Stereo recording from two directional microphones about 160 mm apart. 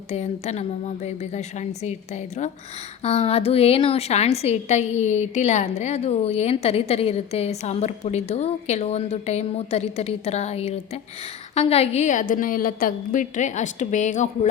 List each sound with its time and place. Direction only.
0.1 s a woman's voice: 45° left (ahead or behind)